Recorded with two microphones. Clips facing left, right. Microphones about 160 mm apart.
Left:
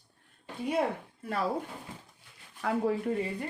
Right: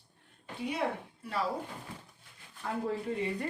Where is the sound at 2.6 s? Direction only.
90° left.